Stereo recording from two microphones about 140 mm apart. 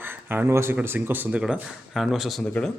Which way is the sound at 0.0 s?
15° right (ahead or behind).